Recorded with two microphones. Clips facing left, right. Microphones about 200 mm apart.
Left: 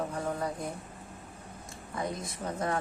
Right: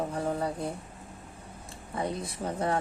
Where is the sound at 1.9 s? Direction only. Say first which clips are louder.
Right 3 dB; 30° right (ahead or behind).